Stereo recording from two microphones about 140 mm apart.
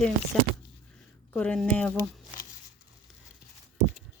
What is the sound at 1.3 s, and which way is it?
Speech, 10° left (ahead or behind).